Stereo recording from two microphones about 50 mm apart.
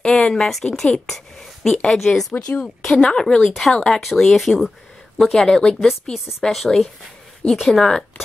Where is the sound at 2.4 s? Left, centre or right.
Left.